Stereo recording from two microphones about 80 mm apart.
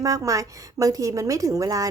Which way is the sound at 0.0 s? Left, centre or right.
Right.